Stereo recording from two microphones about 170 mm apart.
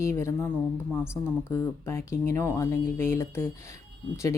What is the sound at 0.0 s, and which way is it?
Speech, 15° left (ahead or behind).